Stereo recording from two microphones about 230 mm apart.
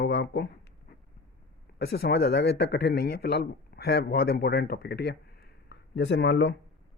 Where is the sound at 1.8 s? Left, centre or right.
Left.